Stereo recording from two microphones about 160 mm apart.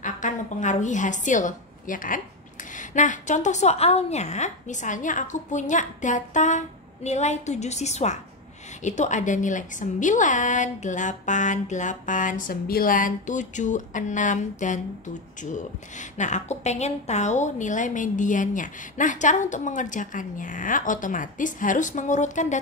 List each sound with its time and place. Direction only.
0.0 s a woman's voice: 50° left (ahead or behind)